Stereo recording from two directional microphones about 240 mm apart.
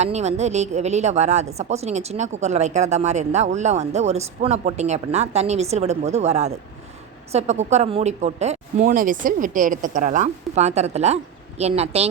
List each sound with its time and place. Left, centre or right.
0.0 s a woman's voice: right